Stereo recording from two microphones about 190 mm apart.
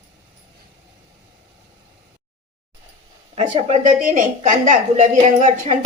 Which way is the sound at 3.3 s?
40° right (ahead or behind).